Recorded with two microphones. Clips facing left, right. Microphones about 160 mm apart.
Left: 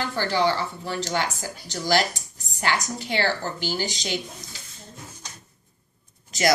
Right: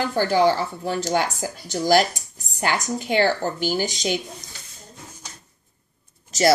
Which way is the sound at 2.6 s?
50° right (ahead or behind).